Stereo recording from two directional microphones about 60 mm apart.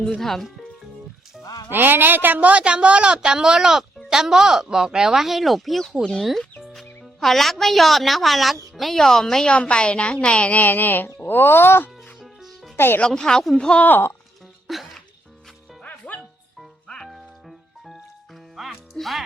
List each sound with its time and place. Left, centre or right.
0.2 s speech: centre
1.7 s a woman's voice: right; by 11.9 s left
12.2 s music: centre
12.7 s speech: left
13.0 s speech: centre
14.7 s music: centre
15.8 s music: left
18.5 s music: centre